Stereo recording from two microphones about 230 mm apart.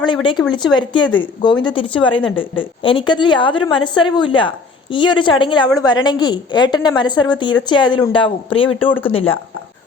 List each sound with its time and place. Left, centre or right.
0.0 s a woman's voice: left